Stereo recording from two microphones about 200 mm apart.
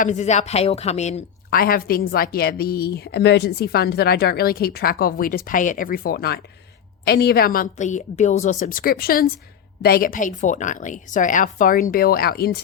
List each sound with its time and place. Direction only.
0.0 s speech: 35° left (ahead or behind)
1.5 s a woman's voice: 45° left (ahead or behind)